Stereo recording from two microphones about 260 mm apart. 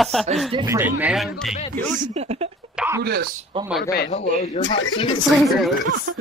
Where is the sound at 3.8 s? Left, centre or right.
Left.